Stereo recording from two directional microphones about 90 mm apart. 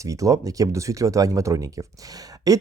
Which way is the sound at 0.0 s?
40° right (ahead or behind).